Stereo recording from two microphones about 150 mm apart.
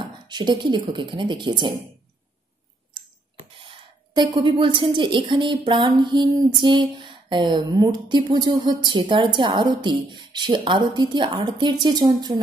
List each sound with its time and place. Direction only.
0.3 s a woman's voice: 30° right (ahead or behind)
3.5 s a woman's voice: 35° right (ahead or behind)